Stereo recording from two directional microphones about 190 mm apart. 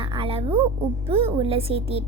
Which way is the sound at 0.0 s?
30° right (ahead or behind).